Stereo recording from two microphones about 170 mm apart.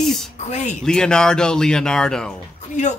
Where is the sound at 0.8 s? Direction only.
5° left (ahead or behind).